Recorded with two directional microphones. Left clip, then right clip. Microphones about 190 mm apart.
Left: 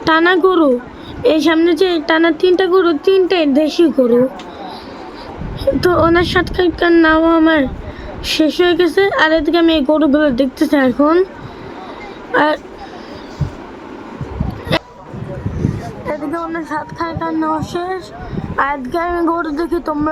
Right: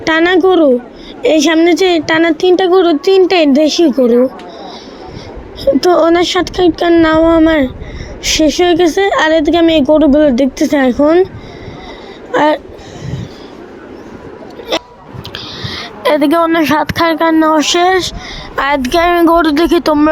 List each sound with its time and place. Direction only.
0.0 s a woman's voice: 20° right (ahead or behind)
5.6 s a woman's voice: 20° right (ahead or behind)
12.3 s speech: 15° right (ahead or behind)
16.0 s a woman's voice: 70° right (ahead or behind)
16.6 s speech: 50° right (ahead or behind)